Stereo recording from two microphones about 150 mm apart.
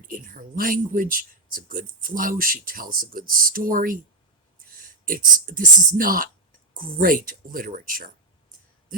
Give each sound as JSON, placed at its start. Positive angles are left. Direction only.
{"t": 0.1, "sound": "speech", "side_deg": -65}